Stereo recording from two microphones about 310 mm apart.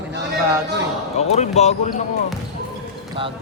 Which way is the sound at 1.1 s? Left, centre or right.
Left.